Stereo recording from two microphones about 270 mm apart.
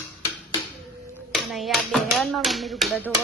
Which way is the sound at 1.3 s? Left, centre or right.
Centre.